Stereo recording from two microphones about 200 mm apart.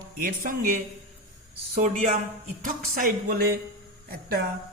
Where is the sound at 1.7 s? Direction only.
35° right (ahead or behind).